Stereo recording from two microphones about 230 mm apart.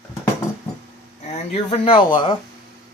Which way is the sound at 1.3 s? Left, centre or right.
Left.